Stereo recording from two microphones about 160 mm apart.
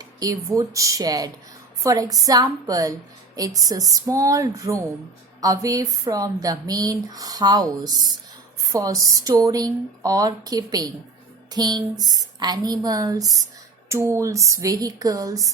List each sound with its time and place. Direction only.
0.0 s speech: 20° right (ahead or behind)